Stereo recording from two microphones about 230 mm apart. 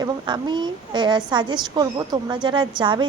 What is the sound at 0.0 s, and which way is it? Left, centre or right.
A woman's voice, centre.